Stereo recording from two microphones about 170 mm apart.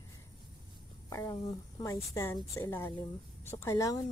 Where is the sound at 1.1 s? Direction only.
20° left (ahead or behind).